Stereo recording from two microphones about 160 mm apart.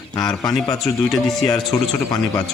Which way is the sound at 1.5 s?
25° left (ahead or behind).